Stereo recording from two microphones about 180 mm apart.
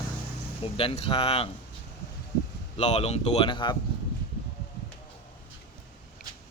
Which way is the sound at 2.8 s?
40° left (ahead or behind).